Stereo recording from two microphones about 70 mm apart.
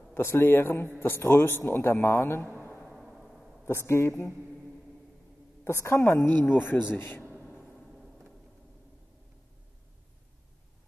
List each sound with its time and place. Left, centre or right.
0.1 s a man's voice: left
2.5 s a sound: centre
2.9 s timpani: centre
3.6 s a man's voice: left
4.3 s music: centre
5.7 s a man's voice: left
7.4 s a sound: centre